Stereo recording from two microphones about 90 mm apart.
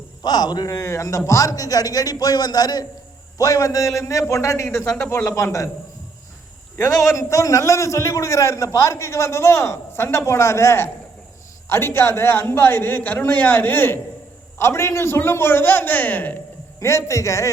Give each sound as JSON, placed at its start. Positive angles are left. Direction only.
{"t": 0.2, "sound": "a man's voice", "side_deg": 50}
{"t": 6.7, "sound": "a man's voice", "side_deg": 30}
{"t": 16.8, "sound": "a man's voice", "side_deg": 30}